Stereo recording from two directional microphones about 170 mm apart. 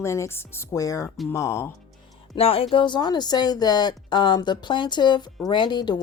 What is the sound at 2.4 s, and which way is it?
Speech, 35° left (ahead or behind).